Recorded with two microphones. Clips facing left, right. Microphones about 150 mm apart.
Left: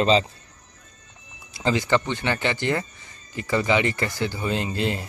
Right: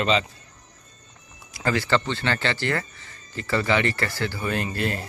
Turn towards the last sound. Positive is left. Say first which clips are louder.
# left 1 dB
turn(degrees=20)  # may be behind; listen again after turning